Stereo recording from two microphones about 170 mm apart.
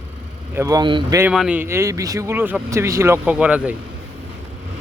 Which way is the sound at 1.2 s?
5° right (ahead or behind).